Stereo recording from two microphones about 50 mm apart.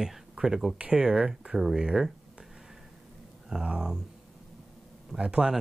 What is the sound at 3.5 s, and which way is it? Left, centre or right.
Speech, centre.